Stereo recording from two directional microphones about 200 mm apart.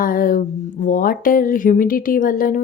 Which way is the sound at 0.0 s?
45° left (ahead or behind).